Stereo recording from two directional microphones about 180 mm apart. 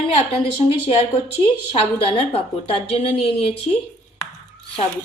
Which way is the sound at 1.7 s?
35° left (ahead or behind).